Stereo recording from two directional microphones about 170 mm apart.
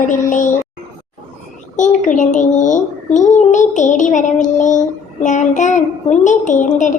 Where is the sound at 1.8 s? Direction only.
50° left (ahead or behind).